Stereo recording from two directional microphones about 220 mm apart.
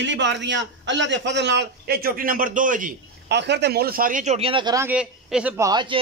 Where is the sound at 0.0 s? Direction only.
55° right (ahead or behind); by 4.8 s 20° right (ahead or behind).